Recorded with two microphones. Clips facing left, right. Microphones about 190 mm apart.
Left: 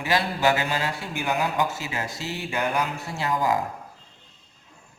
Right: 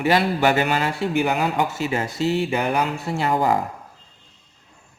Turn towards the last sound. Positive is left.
turn(degrees=-65)  # may be behind; listen again after turning